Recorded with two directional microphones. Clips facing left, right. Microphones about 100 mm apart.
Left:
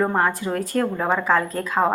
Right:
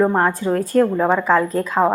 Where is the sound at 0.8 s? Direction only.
10° right (ahead or behind).